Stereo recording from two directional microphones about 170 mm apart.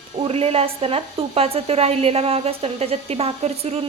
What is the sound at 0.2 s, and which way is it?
A woman's voice, 35° right (ahead or behind).